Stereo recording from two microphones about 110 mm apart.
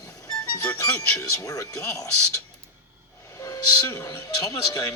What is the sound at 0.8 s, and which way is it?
A man's voice, 30° left (ahead or behind).